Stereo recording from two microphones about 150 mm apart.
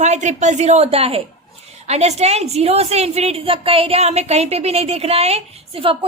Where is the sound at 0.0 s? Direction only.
50° right (ahead or behind).